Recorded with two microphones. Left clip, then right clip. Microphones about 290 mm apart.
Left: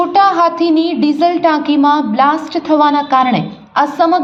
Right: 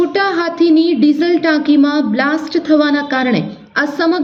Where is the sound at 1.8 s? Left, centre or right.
Left.